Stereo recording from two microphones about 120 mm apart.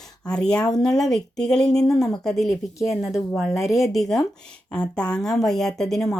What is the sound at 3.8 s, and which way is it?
A woman's voice, centre (ahead or behind).